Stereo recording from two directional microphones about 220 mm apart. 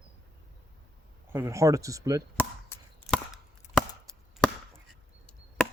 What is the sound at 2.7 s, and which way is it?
Chop, 10° left (ahead or behind).